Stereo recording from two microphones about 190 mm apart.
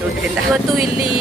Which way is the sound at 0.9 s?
25° left (ahead or behind).